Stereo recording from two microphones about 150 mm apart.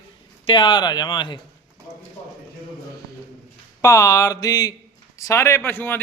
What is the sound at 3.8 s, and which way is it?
A man's voice, 20° left (ahead or behind).